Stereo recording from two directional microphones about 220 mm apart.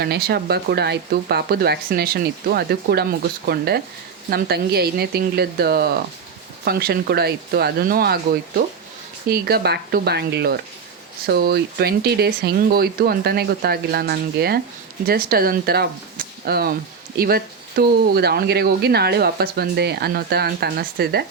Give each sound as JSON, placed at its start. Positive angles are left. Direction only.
{"t": 0.0, "sound": "speech", "side_deg": -45}